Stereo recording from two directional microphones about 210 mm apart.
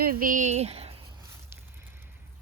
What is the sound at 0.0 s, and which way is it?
Speech, 45° right (ahead or behind).